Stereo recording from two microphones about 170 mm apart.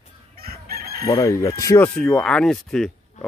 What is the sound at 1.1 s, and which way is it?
Speech, 20° left (ahead or behind).